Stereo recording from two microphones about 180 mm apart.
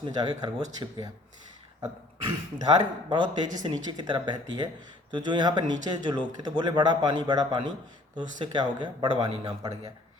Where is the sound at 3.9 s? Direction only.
25° right (ahead or behind).